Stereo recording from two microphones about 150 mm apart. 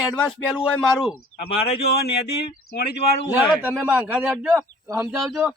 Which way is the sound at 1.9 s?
90° left.